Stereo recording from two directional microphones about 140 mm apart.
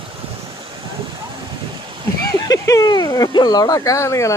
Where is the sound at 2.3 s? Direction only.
25° left (ahead or behind).